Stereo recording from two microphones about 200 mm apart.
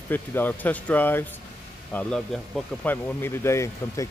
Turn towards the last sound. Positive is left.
turn(degrees=15)  # may be behind; listen again after turning